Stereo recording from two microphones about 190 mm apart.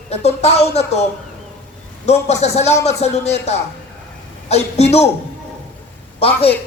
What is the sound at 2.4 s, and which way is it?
Speech, 35° left (ahead or behind).